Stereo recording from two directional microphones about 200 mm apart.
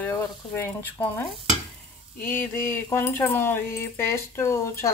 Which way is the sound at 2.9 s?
10° left (ahead or behind).